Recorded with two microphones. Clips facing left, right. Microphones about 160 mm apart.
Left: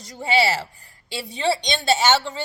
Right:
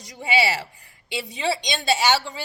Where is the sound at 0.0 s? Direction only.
15° right (ahead or behind).